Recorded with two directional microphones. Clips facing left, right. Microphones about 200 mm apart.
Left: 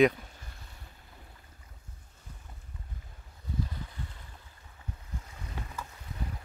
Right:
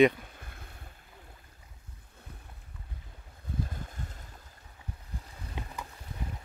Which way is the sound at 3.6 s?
45° right (ahead or behind).